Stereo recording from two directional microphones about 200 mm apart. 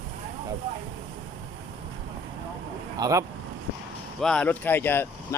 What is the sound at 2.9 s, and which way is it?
Speech, 15° right (ahead or behind).